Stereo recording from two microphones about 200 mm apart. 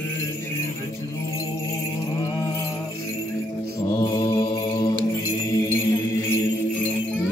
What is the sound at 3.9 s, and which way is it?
Mantra, 20° left (ahead or behind).